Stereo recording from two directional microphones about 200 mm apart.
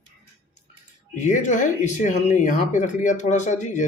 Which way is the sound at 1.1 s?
35° left (ahead or behind).